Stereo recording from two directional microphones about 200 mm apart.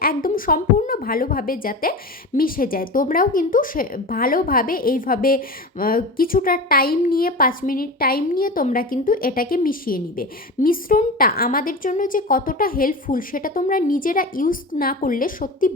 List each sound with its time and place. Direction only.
0.0 s a woman's voice: 45° left (ahead or behind)